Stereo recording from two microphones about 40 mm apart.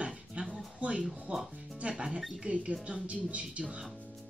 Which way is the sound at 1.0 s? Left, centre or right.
Centre.